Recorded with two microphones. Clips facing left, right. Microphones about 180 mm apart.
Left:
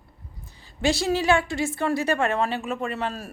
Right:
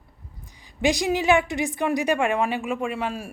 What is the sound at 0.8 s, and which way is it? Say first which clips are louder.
A woman's voice: right 1 dB; 15° right (ahead or behind).